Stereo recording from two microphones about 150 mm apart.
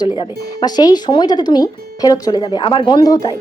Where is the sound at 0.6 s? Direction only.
25° left (ahead or behind).